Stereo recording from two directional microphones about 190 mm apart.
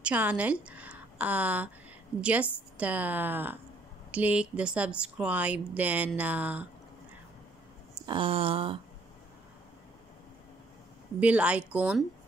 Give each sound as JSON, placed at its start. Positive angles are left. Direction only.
{"t": 0.0, "sound": "a woman's voice", "side_deg": -10}
{"t": 7.9, "sound": "a sound", "side_deg": -25}
{"t": 11.1, "sound": "speech", "side_deg": -5}